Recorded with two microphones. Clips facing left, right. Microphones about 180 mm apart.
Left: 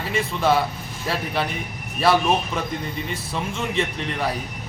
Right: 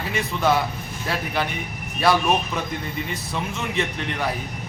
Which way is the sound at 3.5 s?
30° left (ahead or behind).